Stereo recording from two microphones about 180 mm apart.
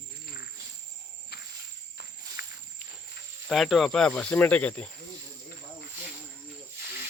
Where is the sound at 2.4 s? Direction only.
60° left (ahead or behind).